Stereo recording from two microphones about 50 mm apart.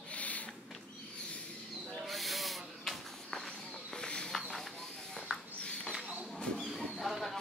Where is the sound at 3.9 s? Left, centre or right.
Centre.